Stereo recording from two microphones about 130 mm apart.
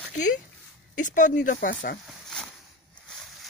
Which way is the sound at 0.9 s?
75° left (ahead or behind).